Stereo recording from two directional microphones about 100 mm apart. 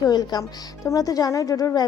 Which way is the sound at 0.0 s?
40° left (ahead or behind).